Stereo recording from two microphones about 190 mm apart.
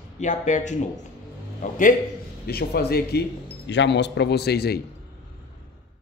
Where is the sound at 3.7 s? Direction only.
70° left (ahead or behind).